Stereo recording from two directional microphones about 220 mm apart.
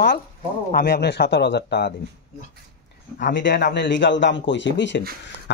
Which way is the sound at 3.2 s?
50° left (ahead or behind).